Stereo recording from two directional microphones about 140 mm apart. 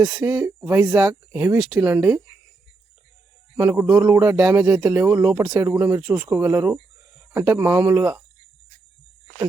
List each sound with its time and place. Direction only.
0.0 s speech: 5° right (ahead or behind)
0.3 s speech: 20° right (ahead or behind)
3.6 s speech: 20° right (ahead or behind)